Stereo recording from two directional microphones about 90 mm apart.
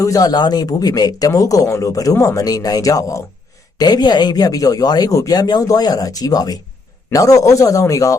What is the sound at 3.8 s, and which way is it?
Speech, 50° left (ahead or behind).